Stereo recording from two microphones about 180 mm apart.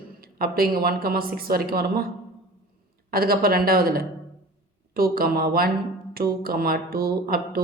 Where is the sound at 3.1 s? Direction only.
55° right (ahead or behind).